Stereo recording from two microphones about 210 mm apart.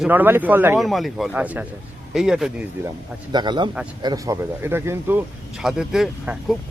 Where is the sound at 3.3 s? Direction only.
20° right (ahead or behind).